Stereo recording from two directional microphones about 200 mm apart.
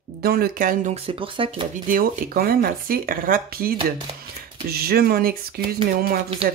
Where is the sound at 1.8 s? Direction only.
45° right (ahead or behind).